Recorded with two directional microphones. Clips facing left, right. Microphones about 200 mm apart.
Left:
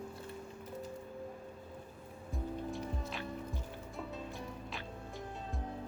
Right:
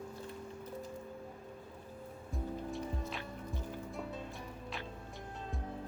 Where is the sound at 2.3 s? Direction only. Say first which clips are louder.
Even; centre (ahead or behind).